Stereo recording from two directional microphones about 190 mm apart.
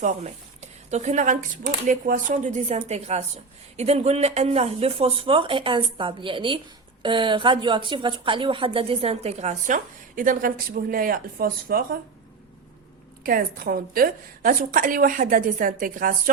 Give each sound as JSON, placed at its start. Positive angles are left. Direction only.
{"t": 0.0, "sound": "a woman's voice", "side_deg": -35}
{"t": 13.2, "sound": "a woman's voice", "side_deg": -50}